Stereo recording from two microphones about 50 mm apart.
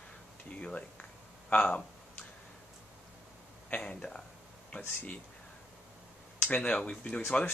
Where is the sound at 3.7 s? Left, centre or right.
Left.